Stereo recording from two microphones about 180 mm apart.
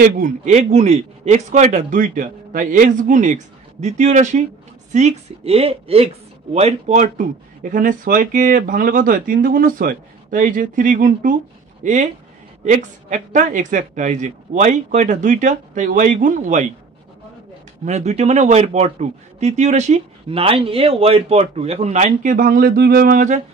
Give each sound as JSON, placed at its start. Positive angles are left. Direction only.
{"t": 0.0, "sound": "a woman's voice", "side_deg": -45}
{"t": 17.8, "sound": "speech", "side_deg": -40}